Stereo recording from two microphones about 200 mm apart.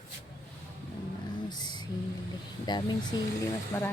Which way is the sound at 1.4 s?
20° left (ahead or behind).